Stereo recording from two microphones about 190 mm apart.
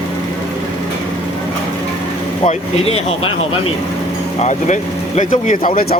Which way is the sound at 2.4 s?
30° left (ahead or behind).